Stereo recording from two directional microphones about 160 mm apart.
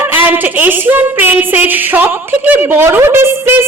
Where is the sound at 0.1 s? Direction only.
10° right (ahead or behind).